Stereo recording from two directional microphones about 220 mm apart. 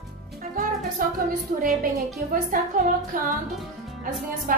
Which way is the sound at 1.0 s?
40° right (ahead or behind).